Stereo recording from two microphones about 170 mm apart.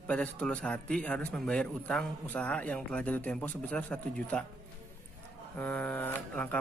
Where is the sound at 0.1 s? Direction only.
5° left (ahead or behind).